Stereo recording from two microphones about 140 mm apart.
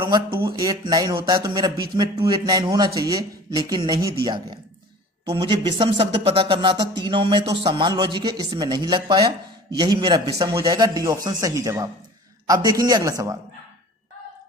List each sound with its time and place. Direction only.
0.3 s speech: 20° right (ahead or behind)